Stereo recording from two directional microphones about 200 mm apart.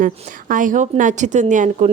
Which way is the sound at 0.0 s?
40° right (ahead or behind).